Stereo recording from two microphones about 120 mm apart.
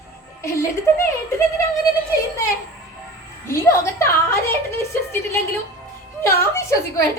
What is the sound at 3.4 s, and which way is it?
A woman's voice, 25° left (ahead or behind).